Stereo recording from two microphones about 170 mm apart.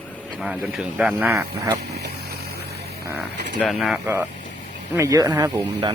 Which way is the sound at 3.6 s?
Centre (ahead or behind).